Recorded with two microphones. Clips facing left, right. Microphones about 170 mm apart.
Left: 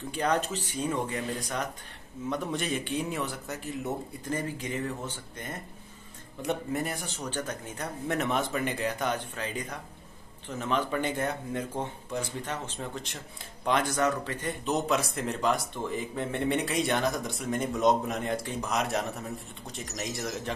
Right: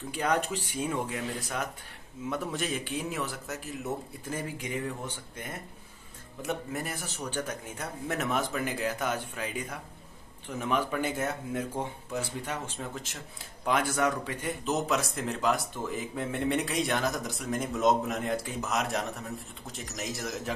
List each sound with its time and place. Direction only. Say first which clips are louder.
0.1 s speech: left 1 dB; 10° right (ahead or behind)